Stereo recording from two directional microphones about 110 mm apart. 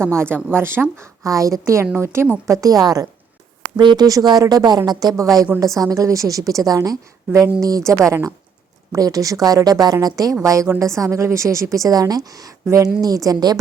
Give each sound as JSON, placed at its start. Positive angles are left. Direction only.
{"t": 0.0, "sound": "a woman's voice", "side_deg": -25}
{"t": 2.6, "sound": "a woman's voice", "side_deg": -35}